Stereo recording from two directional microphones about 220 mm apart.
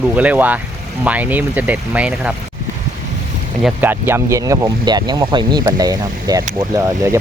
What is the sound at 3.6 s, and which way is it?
Speech, 10° right (ahead or behind).